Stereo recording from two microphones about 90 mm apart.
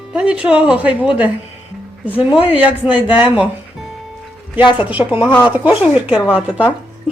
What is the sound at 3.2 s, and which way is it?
Speech, 70° left (ahead or behind).